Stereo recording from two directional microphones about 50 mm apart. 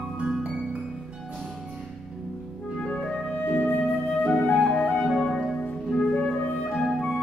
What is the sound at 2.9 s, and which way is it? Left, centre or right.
Music, left.